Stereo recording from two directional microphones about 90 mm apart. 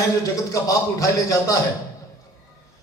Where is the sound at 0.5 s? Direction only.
35° left (ahead or behind).